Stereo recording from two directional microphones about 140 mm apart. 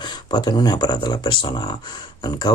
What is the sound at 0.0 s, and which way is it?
Speech, 30° left (ahead or behind).